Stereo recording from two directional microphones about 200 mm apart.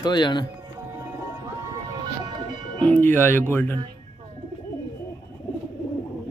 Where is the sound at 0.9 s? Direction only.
15° right (ahead or behind).